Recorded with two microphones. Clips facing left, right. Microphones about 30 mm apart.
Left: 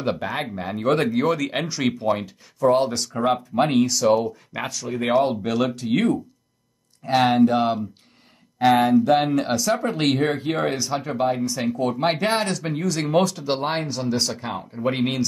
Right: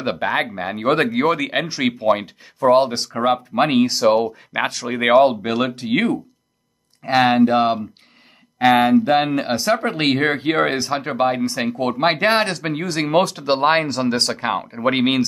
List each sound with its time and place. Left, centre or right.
0.0 s speech: right
4.6 s speech: right
7.0 s speech: right
9.1 s speech: right
9.5 s speech: right
12.1 s speech: right